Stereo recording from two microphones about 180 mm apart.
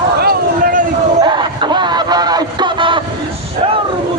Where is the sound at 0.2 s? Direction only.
55° right (ahead or behind).